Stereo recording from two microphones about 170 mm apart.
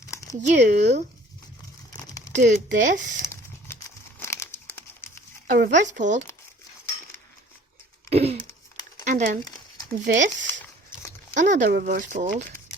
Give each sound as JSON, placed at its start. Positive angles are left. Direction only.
{"t": 0.1, "sound": "a sound", "side_deg": 20}
{"t": 0.4, "sound": "speech", "side_deg": -45}
{"t": 1.9, "sound": "crumpling", "side_deg": 20}
{"t": 2.3, "sound": "speech", "side_deg": -50}
{"t": 3.2, "sound": "crumpling", "side_deg": 15}
{"t": 5.5, "sound": "speech", "side_deg": -50}
{"t": 8.1, "sound": "a sound", "side_deg": -35}
{"t": 9.0, "sound": "speech", "side_deg": -45}